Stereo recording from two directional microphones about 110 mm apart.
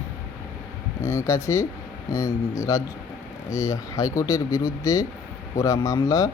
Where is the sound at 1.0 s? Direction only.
25° left (ahead or behind).